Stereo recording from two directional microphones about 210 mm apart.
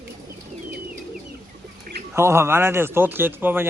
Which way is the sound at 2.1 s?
10° right (ahead or behind).